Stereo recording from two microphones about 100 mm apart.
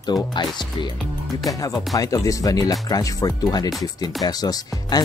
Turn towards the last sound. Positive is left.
turn(degrees=40)  # may be behind; listen again after turning